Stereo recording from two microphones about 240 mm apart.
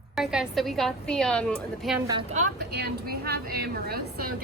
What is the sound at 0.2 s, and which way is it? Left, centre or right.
A woman's voice, centre.